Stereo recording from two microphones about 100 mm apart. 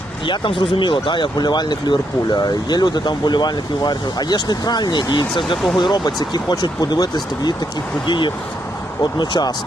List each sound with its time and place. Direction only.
0.3 s speech: 55° left (ahead or behind)